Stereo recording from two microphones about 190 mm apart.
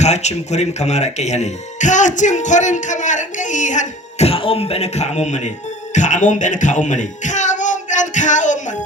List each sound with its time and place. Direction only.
0.0 s speech: 35° left (ahead or behind)